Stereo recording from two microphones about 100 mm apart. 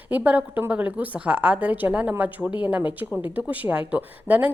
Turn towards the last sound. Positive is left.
turn(degrees=-15)  # may be behind; listen again after turning